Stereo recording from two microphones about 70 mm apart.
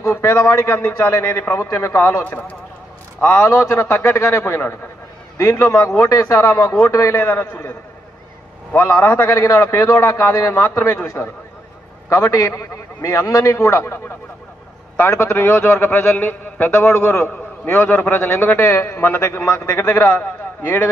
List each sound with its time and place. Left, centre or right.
0.0 s a man's voice: left
2.2 s a man's voice: left
3.4 s a man's voice: left
7.2 s a man's voice: left
9.0 s a man's voice: left
9.3 s a man's voice: left
11.2 s speech: centre
12.1 s a man's voice: left